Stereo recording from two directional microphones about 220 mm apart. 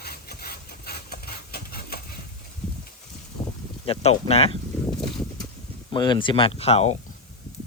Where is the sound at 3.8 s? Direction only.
25° left (ahead or behind).